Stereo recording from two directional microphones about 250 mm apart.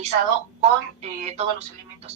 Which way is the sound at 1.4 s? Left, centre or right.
Right.